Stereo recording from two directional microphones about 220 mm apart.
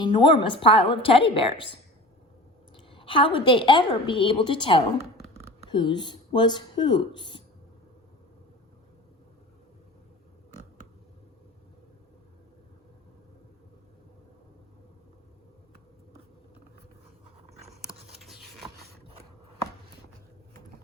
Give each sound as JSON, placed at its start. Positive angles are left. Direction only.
{"t": 0.0, "sound": "a woman's voice", "side_deg": 20}
{"t": 2.9, "sound": "a woman's voice", "side_deg": 20}
{"t": 18.2, "sound": "scratch", "side_deg": 0}